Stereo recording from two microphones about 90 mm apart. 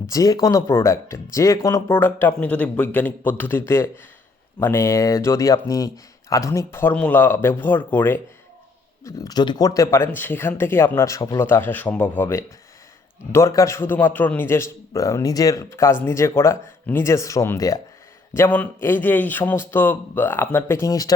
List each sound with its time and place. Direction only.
0.1 s a man's voice: 40° left (ahead or behind)
1.9 s a man's voice: 25° left (ahead or behind)
4.6 s a man's voice: 30° left (ahead or behind)
6.7 s a man's voice: 25° left (ahead or behind)
9.0 s a man's voice: 40° left (ahead or behind)
11.3 s a man's voice: 25° left (ahead or behind)
13.3 s a man's voice: 35° left (ahead or behind)
18.3 s a man's voice: 20° left (ahead or behind)